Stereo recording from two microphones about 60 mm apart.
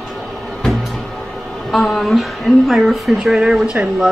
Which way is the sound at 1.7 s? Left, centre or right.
Centre.